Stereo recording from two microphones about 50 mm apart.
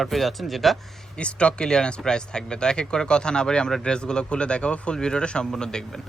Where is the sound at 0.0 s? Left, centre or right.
Centre.